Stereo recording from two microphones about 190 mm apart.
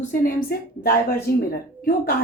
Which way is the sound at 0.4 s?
55° left (ahead or behind).